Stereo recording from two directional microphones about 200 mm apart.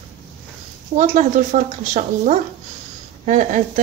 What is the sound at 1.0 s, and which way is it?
A woman's voice, 40° right (ahead or behind).